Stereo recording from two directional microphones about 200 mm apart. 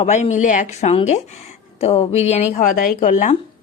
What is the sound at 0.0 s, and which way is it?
Speech, 35° left (ahead or behind).